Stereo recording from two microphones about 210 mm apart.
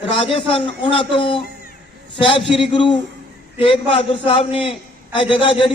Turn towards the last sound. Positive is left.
turn(degrees=25)  # may be behind; listen again after turning